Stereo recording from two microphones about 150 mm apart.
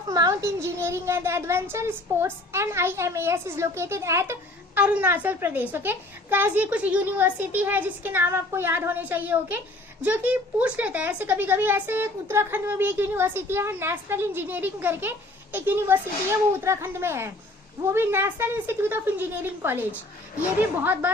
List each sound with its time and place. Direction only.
0.1 s a child's voice: 20° right (ahead or behind)